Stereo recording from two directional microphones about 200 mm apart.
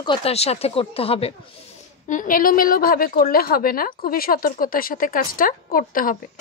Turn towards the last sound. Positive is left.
turn(degrees=45)  # may be behind; listen again after turning